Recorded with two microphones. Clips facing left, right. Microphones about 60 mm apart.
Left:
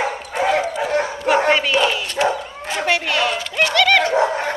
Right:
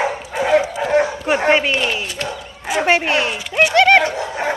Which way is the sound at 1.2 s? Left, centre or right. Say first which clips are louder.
Even; centre.